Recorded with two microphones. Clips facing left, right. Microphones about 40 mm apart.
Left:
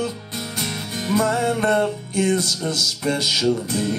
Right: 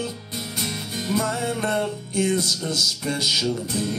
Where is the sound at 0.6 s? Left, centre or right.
Left.